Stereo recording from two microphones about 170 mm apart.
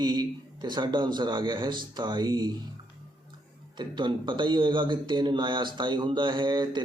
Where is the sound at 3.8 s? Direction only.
25° right (ahead or behind).